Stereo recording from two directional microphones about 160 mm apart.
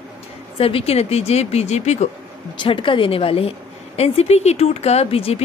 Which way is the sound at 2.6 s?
30° left (ahead or behind).